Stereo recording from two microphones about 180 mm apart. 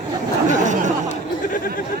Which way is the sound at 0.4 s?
40° right (ahead or behind).